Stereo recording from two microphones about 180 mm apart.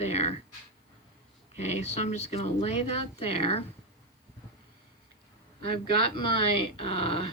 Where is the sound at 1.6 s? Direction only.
40° left (ahead or behind).